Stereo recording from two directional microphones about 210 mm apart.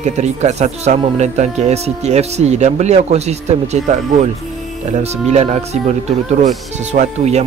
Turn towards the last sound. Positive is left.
turn(degrees=-30)  # may be behind; listen again after turning